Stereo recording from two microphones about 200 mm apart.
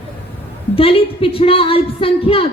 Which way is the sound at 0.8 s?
30° left (ahead or behind).